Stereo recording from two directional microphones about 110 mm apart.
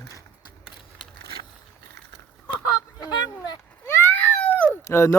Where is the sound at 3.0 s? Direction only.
35° left (ahead or behind).